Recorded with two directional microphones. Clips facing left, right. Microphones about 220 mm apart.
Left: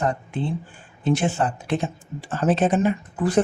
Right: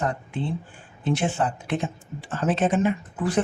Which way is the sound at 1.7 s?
35° left (ahead or behind).